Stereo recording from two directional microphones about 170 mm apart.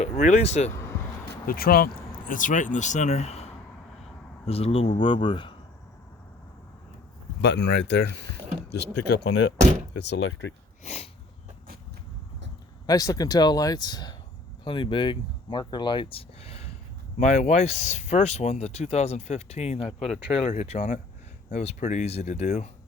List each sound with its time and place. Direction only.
0.2 s speech: 40° left (ahead or behind)
1.5 s speech: 60° left (ahead or behind); by 5.5 s 30° left (ahead or behind)
7.4 s speech: 90° left
10.8 s speech: 40° left (ahead or behind)
12.8 s speech: 20° left (ahead or behind); by 22.7 s 40° left (ahead or behind)